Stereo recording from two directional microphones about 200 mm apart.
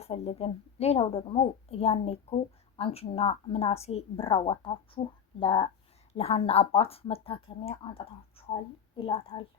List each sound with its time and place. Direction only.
0.0 s a woman's voice: 30° left (ahead or behind)